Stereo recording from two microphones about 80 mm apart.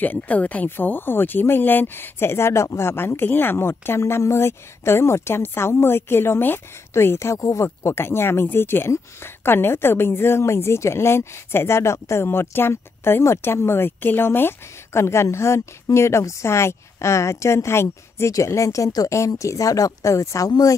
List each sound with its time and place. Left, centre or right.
0.0 s speech: centre
7.3 s speech: left
7.6 s speech: left